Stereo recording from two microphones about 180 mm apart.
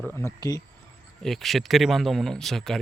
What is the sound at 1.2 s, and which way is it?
Speech, centre (ahead or behind).